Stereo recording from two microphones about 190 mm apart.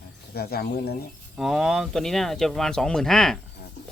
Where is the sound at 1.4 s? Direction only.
Centre (ahead or behind).